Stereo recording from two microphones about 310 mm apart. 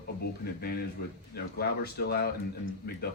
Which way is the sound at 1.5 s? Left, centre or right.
Left.